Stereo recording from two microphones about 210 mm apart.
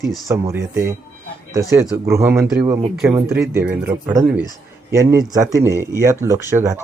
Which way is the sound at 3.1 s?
10° right (ahead or behind).